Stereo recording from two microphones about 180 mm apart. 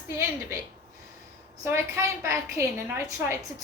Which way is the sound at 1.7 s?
15° right (ahead or behind).